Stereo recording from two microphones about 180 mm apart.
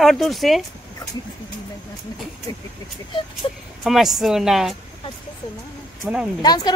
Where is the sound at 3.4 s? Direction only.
25° left (ahead or behind).